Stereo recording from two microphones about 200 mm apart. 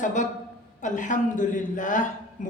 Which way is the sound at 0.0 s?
40° left (ahead or behind).